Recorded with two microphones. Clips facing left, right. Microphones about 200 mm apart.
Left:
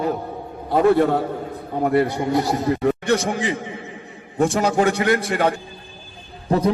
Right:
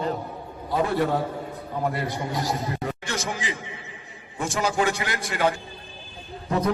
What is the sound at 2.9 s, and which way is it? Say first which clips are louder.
Speech: left 11 dB; 60° left (ahead or behind).